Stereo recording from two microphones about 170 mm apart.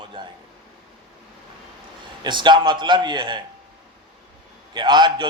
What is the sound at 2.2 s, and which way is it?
A man's voice, 25° right (ahead or behind).